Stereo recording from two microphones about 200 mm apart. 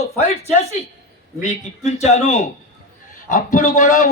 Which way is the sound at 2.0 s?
35° left (ahead or behind).